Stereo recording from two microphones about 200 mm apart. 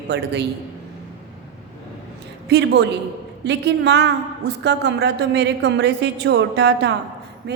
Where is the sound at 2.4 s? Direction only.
60° right (ahead or behind).